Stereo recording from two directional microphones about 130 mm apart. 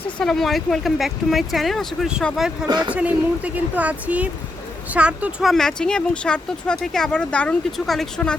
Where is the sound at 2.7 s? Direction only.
35° right (ahead or behind).